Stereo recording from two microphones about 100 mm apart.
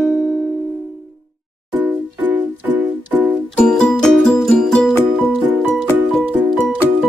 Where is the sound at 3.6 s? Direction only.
10° left (ahead or behind).